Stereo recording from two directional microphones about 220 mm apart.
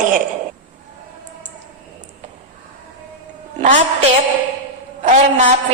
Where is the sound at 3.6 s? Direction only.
35° right (ahead or behind).